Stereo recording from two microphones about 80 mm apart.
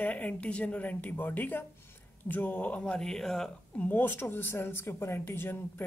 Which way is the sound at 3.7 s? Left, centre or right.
Centre.